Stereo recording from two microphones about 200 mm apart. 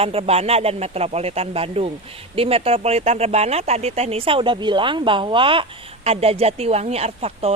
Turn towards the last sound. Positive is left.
turn(degrees=-30)  # may be behind; listen again after turning